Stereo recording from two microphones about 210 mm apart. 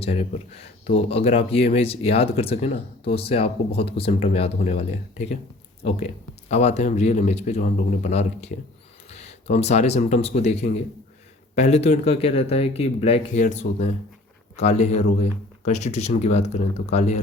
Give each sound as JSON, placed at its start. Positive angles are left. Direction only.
{"t": 0.0, "sound": "speech", "side_deg": 30}
{"t": 6.5, "sound": "speech", "side_deg": 30}